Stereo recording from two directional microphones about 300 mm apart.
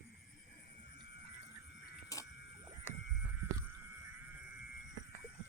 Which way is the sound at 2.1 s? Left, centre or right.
Centre.